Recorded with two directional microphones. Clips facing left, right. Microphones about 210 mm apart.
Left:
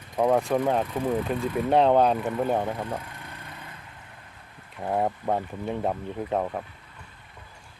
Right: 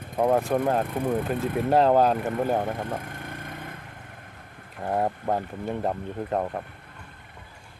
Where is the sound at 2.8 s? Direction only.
50° right (ahead or behind).